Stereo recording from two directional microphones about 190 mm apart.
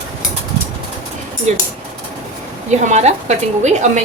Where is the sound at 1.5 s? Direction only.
40° right (ahead or behind).